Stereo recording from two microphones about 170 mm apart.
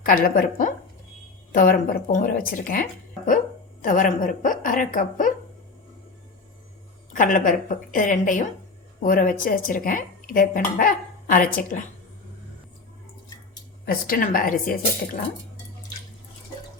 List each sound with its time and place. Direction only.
0.0 s a woman's voice: 55° left (ahead or behind)
7.1 s speech: 50° left (ahead or behind)
13.8 s a woman's voice: 55° left (ahead or behind)